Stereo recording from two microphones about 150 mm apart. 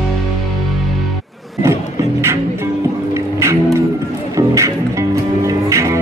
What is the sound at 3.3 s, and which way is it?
Music, 20° right (ahead or behind).